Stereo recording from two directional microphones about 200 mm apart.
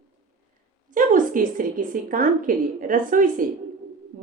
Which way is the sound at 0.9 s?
45° right (ahead or behind).